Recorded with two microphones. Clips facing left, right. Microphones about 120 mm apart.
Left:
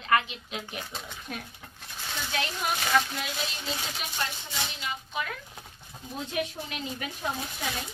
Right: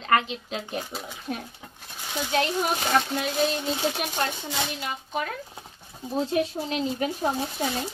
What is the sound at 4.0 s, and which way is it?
Speech, 60° right (ahead or behind).